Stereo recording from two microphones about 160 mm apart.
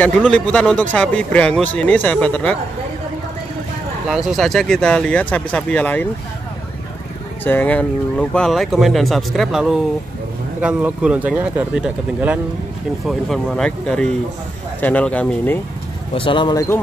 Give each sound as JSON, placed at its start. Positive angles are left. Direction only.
{"t": 0.0, "sound": "speech", "side_deg": 5}
{"t": 4.1, "sound": "speech", "side_deg": 0}
{"t": 7.4, "sound": "speech", "side_deg": 10}
{"t": 16.2, "sound": "speech", "side_deg": 30}